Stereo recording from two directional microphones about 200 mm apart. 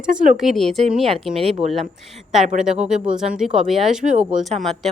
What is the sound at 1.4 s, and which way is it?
Speech, 30° right (ahead or behind).